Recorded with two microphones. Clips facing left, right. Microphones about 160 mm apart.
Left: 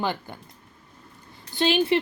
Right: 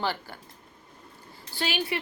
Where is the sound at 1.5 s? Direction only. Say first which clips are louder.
Left 9 dB; 25° left (ahead or behind).